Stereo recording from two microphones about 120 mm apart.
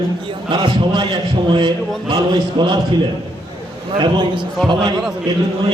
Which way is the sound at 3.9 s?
40° right (ahead or behind).